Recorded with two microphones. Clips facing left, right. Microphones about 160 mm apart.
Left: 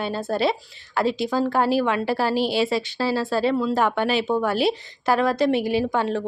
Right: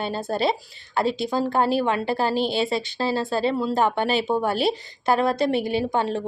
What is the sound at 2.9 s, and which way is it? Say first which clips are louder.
Speech: left 1 dB; 30° right (ahead or behind).